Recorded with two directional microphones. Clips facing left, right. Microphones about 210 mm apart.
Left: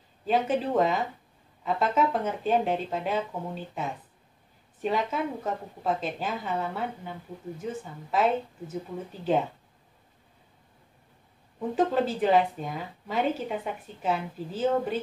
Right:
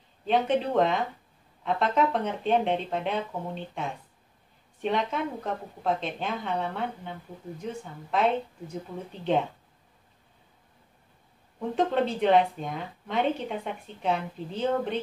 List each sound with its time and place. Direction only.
0.2 s a woman's voice: 5° left (ahead or behind)
11.7 s a woman's voice: 5° left (ahead or behind)